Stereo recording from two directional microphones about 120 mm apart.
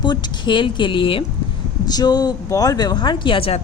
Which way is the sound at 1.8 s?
35° left (ahead or behind).